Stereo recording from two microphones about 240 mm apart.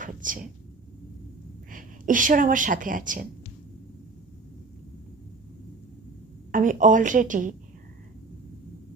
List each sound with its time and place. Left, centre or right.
0.0 s a sound: right
1.7 s a woman's voice: right
6.5 s a woman's voice: right